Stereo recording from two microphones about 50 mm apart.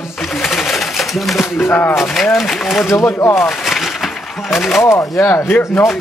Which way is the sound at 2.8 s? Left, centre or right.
Left.